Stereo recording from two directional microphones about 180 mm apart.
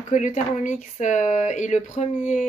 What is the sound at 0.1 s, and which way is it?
A woman's voice, 45° left (ahead or behind).